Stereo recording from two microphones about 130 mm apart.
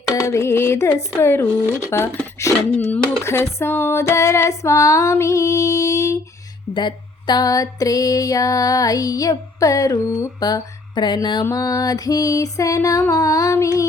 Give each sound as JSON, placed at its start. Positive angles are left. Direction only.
{"t": 0.1, "sound": "speech", "side_deg": 25}
{"t": 10.4, "sound": "a sound", "side_deg": 35}
{"t": 11.4, "sound": "speech", "side_deg": 25}